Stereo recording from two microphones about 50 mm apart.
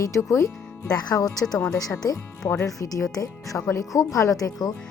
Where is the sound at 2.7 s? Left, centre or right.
Left.